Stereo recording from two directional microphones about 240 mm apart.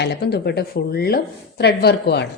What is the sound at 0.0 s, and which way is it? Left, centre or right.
A woman's voice, left.